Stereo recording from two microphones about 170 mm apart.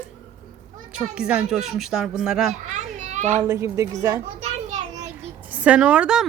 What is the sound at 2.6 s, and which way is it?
Children playing, 45° right (ahead or behind).